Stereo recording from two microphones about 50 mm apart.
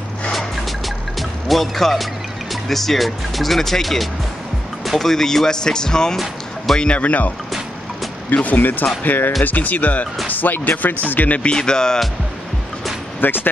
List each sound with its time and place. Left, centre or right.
0.3 s music: centre
1.5 s speech: centre
6.8 s speech: left
11.5 s speech: centre
13.2 s speech: left